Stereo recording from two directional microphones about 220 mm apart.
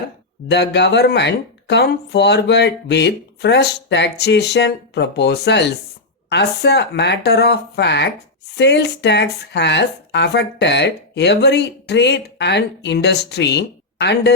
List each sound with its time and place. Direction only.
0.4 s speech: 50° left (ahead or behind)